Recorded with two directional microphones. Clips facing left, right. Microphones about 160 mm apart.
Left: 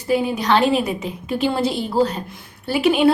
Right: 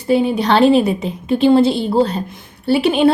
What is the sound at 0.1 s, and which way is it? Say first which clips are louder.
A woman's voice: right 4 dB; 30° right (ahead or behind).